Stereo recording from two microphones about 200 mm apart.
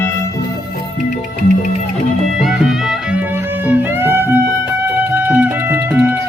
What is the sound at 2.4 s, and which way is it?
Music, centre (ahead or behind).